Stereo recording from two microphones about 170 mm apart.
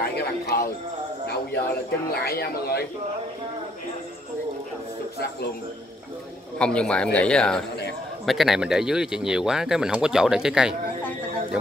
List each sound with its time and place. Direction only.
0.0 s a man's voice: 65° left (ahead or behind)
2.2 s speech: 65° left (ahead or behind)
6.6 s speech: 5° left (ahead or behind)